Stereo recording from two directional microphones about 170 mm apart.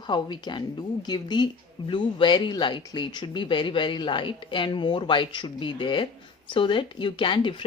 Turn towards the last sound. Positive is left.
turn(degrees=30)  # may be behind; listen again after turning